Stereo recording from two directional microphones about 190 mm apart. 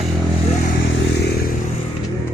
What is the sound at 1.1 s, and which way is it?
Vehicle, 60° left (ahead or behind).